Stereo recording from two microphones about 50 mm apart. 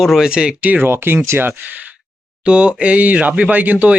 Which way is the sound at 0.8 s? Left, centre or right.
Right.